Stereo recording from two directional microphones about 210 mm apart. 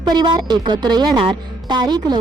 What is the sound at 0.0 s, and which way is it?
A woman's voice, 20° right (ahead or behind).